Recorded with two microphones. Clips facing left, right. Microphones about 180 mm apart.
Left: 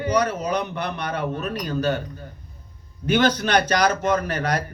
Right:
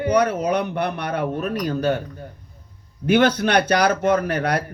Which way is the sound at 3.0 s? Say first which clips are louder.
Right 3 dB; 60° right (ahead or behind).